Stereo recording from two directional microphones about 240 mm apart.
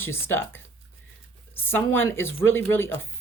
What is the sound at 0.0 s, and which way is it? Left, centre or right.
Speech, centre.